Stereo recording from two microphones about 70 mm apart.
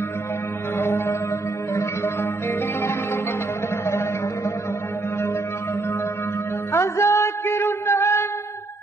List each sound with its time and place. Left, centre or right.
0.7 s music: left
6.7 s music: left